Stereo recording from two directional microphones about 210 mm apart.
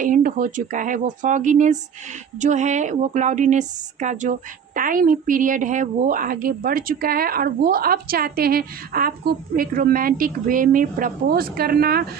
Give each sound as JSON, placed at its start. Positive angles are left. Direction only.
{"t": 0.0, "sound": "a woman's voice", "side_deg": -40}